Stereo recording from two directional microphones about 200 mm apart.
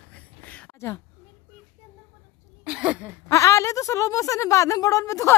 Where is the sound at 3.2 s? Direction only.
15° left (ahead or behind).